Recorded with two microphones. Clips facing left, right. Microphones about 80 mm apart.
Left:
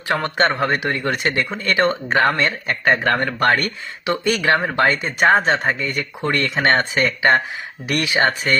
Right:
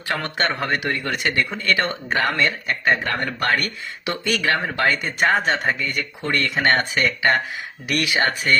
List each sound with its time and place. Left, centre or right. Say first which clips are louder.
0.1 s speech: left 5 dB; left
4.0 s speech: left 4 dB; left